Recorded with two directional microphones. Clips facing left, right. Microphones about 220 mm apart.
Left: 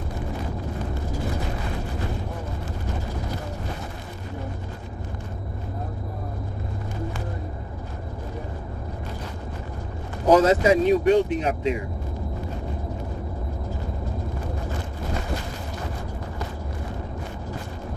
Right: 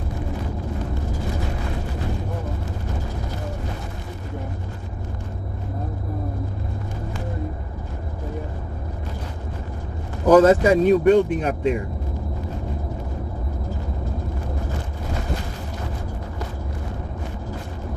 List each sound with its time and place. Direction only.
10.2 s speech: 55° right (ahead or behind)